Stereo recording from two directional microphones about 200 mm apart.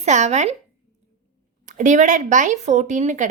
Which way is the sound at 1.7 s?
40° right (ahead or behind).